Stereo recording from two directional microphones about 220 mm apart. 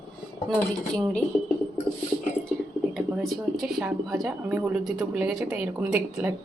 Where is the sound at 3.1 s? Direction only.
Centre (ahead or behind).